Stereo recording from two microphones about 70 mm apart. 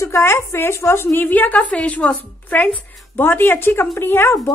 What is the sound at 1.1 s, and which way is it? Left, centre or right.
A woman's voice, left.